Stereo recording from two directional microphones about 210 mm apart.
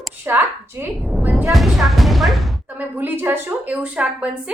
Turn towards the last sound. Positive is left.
turn(degrees=-5)  # may be behind; listen again after turning